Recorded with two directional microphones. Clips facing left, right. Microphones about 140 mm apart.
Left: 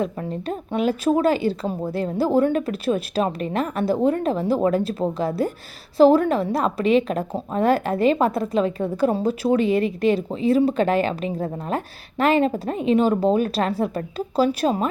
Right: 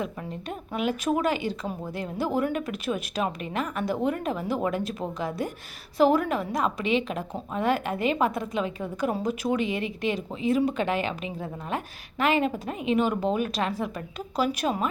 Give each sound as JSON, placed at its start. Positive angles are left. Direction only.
{"t": 0.0, "sound": "a woman's voice", "side_deg": 35}